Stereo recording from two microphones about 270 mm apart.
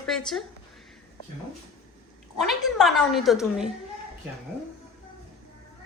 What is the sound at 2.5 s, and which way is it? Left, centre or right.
A woman's voice, centre.